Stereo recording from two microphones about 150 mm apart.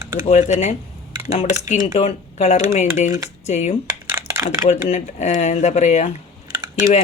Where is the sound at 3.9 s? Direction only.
20° right (ahead or behind).